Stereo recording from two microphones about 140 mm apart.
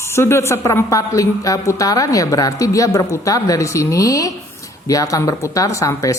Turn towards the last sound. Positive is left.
turn(degrees=25)  # may be behind; listen again after turning